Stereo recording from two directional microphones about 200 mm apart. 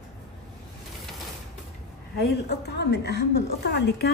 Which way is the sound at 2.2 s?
55° left (ahead or behind).